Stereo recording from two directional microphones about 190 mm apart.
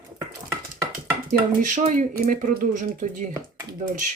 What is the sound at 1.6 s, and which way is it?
Speech, 40° right (ahead or behind).